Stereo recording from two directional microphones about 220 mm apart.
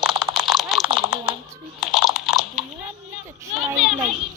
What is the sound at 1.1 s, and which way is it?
Typing, 5° right (ahead or behind).